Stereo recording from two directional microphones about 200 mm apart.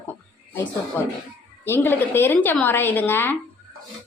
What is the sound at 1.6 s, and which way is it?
A woman's voice, 10° left (ahead or behind).